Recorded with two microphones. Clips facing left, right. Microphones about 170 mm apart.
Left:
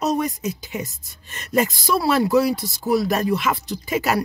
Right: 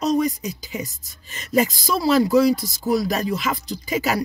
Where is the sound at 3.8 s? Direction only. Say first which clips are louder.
Left 1 dB; centre (ahead or behind).